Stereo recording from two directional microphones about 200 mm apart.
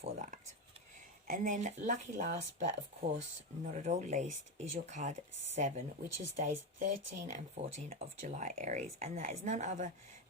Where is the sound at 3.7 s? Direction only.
35° right (ahead or behind).